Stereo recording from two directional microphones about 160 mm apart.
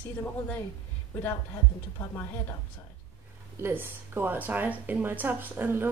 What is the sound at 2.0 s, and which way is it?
Speech, 15° left (ahead or behind).